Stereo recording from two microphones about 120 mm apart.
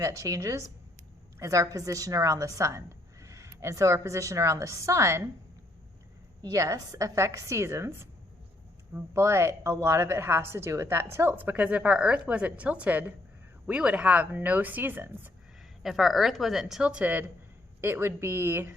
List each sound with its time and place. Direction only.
0.0 s a woman's voice: 25° right (ahead or behind)
6.4 s a woman's voice: 30° right (ahead or behind)
15.8 s a woman's voice: centre (ahead or behind); by 18.7 s 20° right (ahead or behind)